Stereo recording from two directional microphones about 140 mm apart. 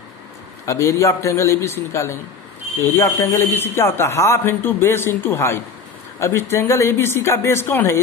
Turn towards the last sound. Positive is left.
turn(degrees=15)  # may be behind; listen again after turning